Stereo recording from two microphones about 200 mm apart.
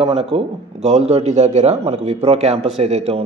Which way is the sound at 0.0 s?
30° right (ahead or behind).